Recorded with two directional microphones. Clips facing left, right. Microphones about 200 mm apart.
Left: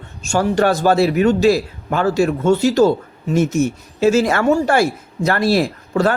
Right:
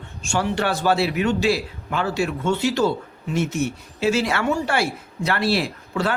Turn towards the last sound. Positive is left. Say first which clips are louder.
# left 7 dB
turn(degrees=45)  # may be behind; listen again after turning